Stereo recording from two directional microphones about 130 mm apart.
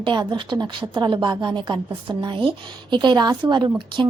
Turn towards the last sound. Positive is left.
turn(degrees=-40)  # may be behind; listen again after turning